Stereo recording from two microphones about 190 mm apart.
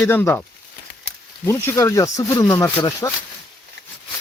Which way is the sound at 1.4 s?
15° left (ahead or behind).